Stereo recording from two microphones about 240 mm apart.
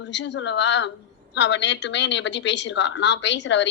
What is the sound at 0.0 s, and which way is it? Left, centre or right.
A woman's voice, left.